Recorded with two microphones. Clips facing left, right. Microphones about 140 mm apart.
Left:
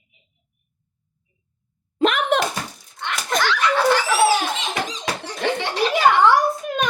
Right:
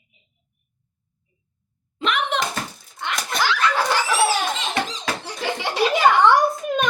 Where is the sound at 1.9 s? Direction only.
45° left (ahead or behind).